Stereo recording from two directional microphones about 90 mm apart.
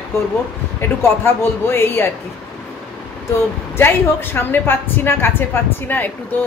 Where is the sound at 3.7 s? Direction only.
25° left (ahead or behind).